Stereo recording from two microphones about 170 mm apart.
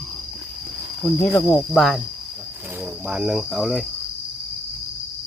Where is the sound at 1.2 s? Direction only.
15° left (ahead or behind).